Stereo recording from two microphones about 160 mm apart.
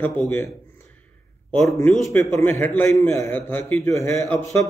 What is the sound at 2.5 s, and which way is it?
A man's voice, 10° left (ahead or behind).